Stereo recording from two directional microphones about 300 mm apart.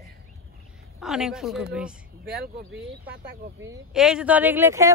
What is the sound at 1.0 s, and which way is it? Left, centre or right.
Speech, centre.